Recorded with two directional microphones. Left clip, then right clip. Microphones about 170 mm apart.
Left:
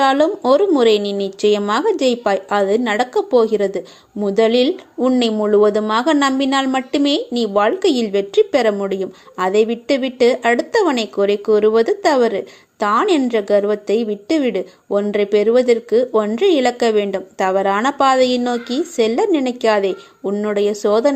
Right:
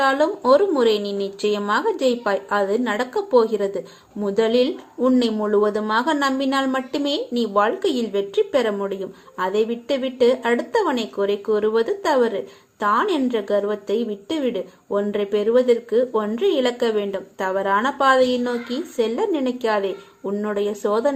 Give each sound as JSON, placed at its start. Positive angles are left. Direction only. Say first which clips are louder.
{"t": 0.0, "sound": "speech", "louder": "left 4 dB", "side_deg": 40}